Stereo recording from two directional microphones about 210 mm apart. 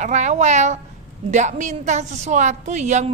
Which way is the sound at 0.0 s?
35° right (ahead or behind).